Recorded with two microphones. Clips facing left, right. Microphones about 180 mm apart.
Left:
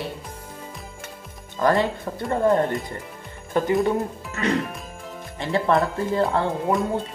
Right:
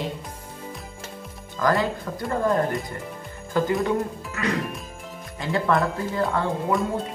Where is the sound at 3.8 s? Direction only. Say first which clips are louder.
Left 1 dB; 25° left (ahead or behind).